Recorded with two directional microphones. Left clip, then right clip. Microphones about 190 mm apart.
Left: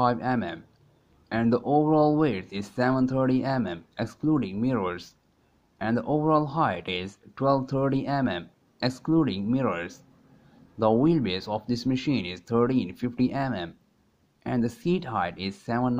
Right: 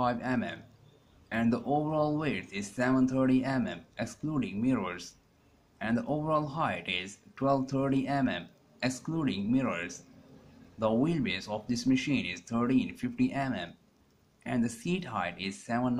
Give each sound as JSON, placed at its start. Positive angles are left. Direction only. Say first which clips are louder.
{"t": 0.0, "sound": "speech", "louder": "left 6 dB", "side_deg": 40}